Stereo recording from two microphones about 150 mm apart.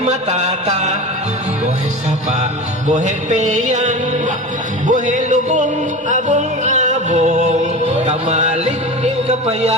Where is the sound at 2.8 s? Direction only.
55° right (ahead or behind).